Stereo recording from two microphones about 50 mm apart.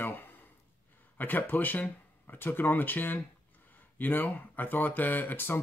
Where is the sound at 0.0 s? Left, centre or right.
Left.